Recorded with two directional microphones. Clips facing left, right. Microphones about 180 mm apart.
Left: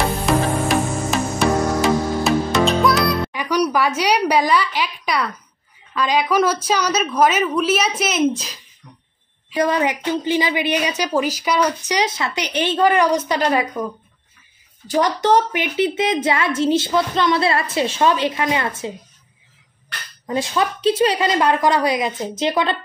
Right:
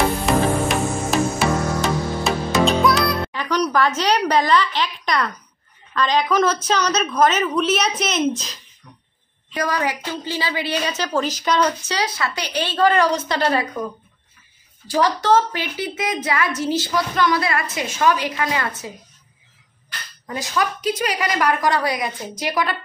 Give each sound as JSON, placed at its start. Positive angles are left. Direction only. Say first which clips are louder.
{"t": 0.7, "sound": "music", "louder": "left 1 dB", "side_deg": 0}
{"t": 3.3, "sound": "a woman's voice", "louder": "left 2 dB", "side_deg": 10}
{"t": 9.6, "sound": "a woman's voice", "louder": "left 4 dB", "side_deg": 25}
{"t": 14.9, "sound": "a woman's voice", "louder": "left 1 dB", "side_deg": 20}
{"t": 20.2, "sound": "a woman's voice", "louder": "left 3 dB", "side_deg": 25}